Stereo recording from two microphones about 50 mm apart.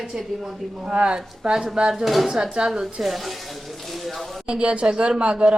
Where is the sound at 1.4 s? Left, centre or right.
Centre.